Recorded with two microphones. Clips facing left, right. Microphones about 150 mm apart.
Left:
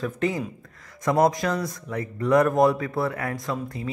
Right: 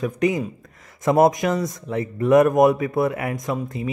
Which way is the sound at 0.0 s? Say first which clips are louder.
Right 5 dB; 15° right (ahead or behind).